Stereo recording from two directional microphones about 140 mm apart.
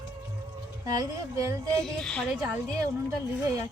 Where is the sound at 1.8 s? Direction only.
5° left (ahead or behind).